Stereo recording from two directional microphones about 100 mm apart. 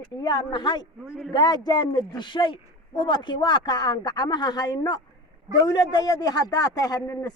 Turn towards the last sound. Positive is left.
turn(degrees=35)  # may be behind; listen again after turning